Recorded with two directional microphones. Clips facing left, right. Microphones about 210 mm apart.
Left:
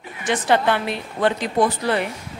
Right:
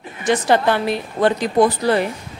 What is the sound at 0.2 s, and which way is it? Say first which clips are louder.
A woman's voice: right 3 dB; 40° right (ahead or behind).